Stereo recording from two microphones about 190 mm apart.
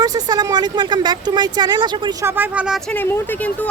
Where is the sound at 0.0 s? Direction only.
20° right (ahead or behind).